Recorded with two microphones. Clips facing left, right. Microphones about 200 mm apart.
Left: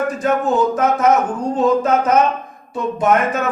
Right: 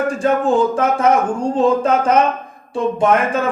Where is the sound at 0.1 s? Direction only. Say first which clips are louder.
Right 2 dB; 30° right (ahead or behind).